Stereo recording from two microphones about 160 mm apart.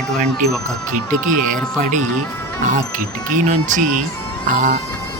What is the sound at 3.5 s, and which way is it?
A man's voice, 55° right (ahead or behind).